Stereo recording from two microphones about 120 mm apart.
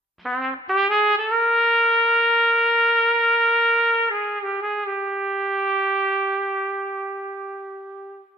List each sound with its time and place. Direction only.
0.3 s trumpet: centre (ahead or behind)